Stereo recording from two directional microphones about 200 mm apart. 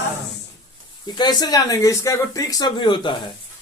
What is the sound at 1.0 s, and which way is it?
Speech, 20° left (ahead or behind).